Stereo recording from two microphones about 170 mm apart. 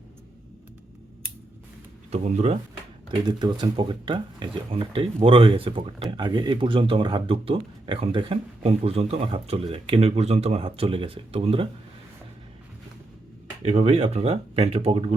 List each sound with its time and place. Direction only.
2.1 s speech: 40° right (ahead or behind)
3.2 s speech: 25° right (ahead or behind)
13.6 s speech: 35° right (ahead or behind)